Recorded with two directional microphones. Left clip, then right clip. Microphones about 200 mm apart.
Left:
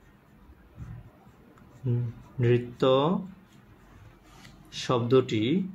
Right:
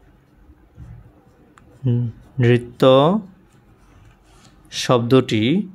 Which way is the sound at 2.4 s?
40° right (ahead or behind).